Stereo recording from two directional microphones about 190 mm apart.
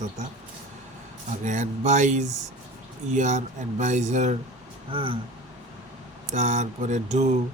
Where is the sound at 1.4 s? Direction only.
40° right (ahead or behind).